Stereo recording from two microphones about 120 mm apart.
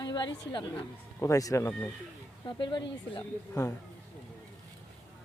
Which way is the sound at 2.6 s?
40° left (ahead or behind).